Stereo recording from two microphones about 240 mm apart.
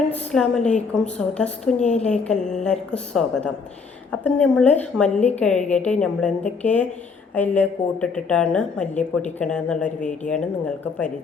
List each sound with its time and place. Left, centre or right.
0.1 s a woman's voice: centre
1.8 s a woman's voice: left
2.0 s a woman's voice: centre